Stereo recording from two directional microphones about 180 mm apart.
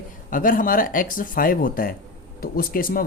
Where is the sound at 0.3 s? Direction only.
50° left (ahead or behind).